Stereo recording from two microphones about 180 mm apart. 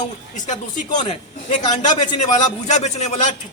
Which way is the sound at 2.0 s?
40° left (ahead or behind).